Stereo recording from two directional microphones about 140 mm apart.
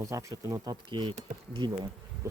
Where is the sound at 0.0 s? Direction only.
25° right (ahead or behind).